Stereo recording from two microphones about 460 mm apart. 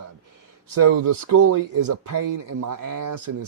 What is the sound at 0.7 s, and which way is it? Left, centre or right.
Speech, right.